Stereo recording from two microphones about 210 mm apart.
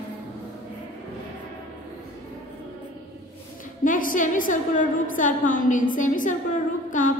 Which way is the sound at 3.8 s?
40° left (ahead or behind).